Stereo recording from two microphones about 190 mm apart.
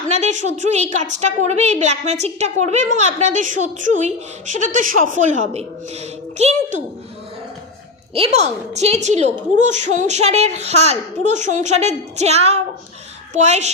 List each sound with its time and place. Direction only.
0.1 s a woman's voice: 40° right (ahead or behind)
8.1 s a woman's voice: 35° right (ahead or behind)